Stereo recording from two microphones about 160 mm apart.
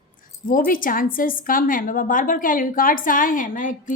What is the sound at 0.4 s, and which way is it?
A woman's voice, 60° left (ahead or behind).